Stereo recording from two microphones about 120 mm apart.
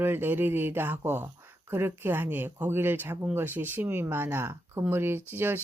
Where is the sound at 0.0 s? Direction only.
15° right (ahead or behind).